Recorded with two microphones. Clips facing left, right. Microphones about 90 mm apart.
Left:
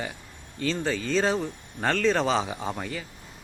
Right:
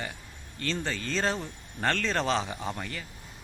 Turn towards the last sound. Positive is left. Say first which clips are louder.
# left 3 dB
turn(degrees=5)  # may be behind; listen again after turning